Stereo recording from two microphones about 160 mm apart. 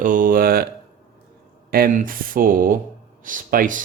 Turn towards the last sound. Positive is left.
turn(degrees=-60)  # may be behind; listen again after turning